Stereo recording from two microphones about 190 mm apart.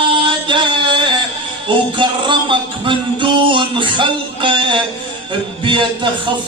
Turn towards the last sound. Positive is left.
turn(degrees=-25)  # may be behind; listen again after turning